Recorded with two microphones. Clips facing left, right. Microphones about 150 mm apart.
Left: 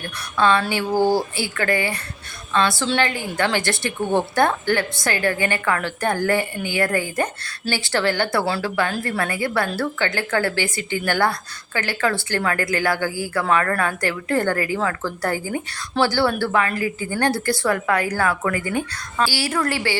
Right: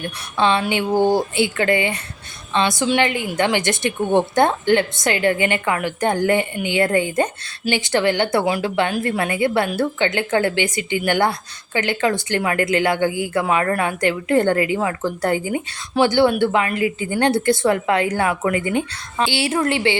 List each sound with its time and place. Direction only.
0.0 s a woman's voice: 25° right (ahead or behind)